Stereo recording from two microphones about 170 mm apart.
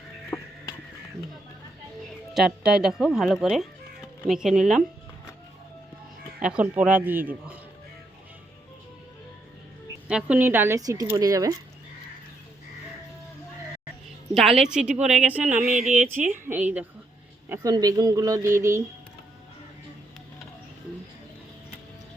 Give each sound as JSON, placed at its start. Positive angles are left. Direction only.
{"t": 0.3, "sound": "music", "side_deg": 15}
{"t": 2.3, "sound": "speech", "side_deg": -5}
{"t": 6.4, "sound": "speech", "side_deg": -5}
{"t": 10.1, "sound": "speech", "side_deg": -5}
{"t": 14.3, "sound": "speech", "side_deg": 0}
{"t": 15.4, "sound": "a sound", "side_deg": -50}
{"t": 16.3, "sound": "speech", "side_deg": -10}
{"t": 17.5, "sound": "speech", "side_deg": -20}